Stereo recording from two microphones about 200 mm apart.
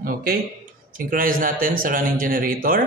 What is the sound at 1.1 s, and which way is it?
A man's voice, 45° right (ahead or behind).